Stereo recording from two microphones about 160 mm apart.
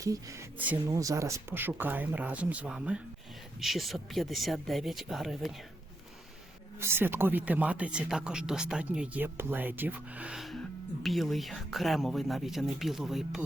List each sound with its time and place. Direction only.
0.0 s speech: 20° right (ahead or behind); by 5.5 s centre (ahead or behind)
6.7 s speech: 15° right (ahead or behind)